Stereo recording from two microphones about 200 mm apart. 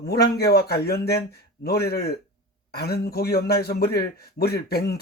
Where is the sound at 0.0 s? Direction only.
55° left (ahead or behind).